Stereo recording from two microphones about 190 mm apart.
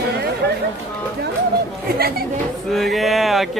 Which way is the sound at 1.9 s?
55° right (ahead or behind).